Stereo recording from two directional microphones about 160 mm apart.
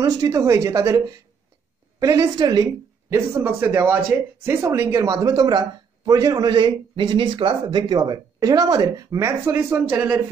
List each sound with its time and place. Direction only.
0.0 s speech: 20° right (ahead or behind)